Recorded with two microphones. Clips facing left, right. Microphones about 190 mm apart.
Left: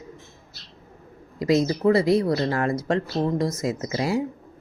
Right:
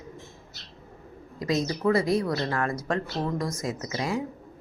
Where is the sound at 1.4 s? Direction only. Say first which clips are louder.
Left 6 dB; 30° left (ahead or behind).